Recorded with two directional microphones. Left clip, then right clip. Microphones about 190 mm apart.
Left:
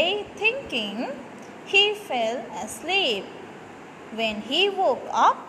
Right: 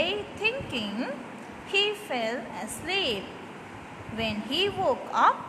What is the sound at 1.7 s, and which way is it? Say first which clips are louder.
A woman's voice: left 6 dB; 5° left (ahead or behind).